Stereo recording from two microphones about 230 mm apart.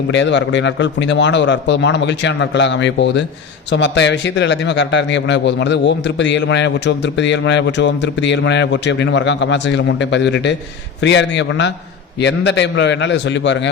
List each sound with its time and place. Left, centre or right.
0.1 s a man's voice: left